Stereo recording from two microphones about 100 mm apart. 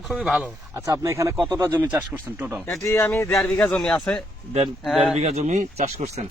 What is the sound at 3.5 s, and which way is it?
A man's voice, 5° left (ahead or behind).